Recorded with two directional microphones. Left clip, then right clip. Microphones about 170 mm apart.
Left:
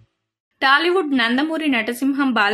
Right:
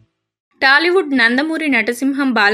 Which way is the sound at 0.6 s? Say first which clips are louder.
Right 4 dB; 10° right (ahead or behind).